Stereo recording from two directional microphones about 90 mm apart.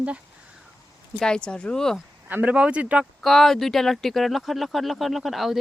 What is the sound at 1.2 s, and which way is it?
Speech, 10° left (ahead or behind).